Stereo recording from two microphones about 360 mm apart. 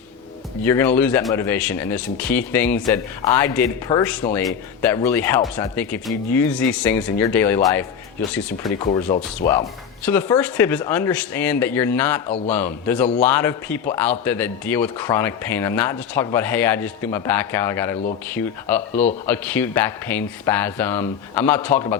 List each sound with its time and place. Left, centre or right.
0.6 s speech: centre
8.8 s speech: centre
10.1 s speech: centre